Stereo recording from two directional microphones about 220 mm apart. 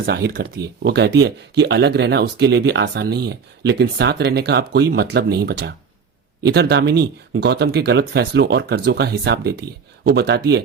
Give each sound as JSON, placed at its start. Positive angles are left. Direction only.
{"t": 0.0, "sound": "speech", "side_deg": -45}